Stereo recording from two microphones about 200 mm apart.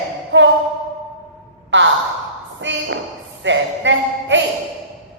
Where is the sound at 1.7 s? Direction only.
65° right (ahead or behind).